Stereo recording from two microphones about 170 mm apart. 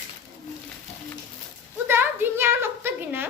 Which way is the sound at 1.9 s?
15° right (ahead or behind).